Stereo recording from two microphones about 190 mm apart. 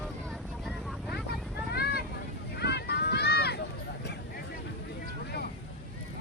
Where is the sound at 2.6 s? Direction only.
60° left (ahead or behind).